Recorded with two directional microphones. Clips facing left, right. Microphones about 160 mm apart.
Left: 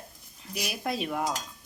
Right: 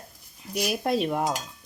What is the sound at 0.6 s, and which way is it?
Speech, 45° right (ahead or behind).